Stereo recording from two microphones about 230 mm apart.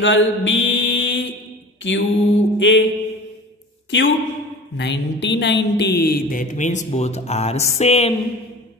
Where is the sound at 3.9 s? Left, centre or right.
Left.